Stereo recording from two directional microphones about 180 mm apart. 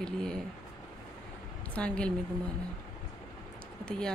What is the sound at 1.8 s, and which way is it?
Speech, 5° left (ahead or behind).